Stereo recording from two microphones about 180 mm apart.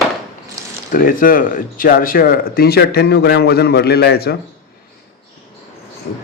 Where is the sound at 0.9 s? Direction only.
50° left (ahead or behind).